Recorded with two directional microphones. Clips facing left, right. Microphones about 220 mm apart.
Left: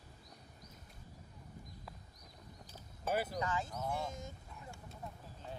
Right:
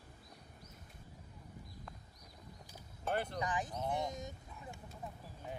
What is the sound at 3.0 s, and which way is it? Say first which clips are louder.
Speech: left 1 dB; 5° left (ahead or behind).